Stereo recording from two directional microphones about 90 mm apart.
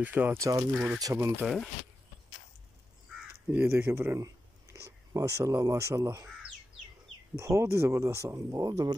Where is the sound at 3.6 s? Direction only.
25° right (ahead or behind).